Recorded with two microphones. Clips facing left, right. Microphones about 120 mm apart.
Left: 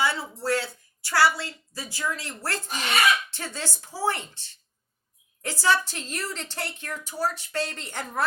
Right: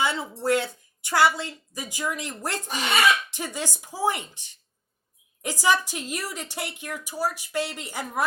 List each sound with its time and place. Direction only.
0.0 s a woman's voice: 20° right (ahead or behind)